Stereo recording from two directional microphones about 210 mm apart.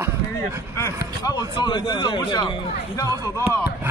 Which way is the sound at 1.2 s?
20° left (ahead or behind).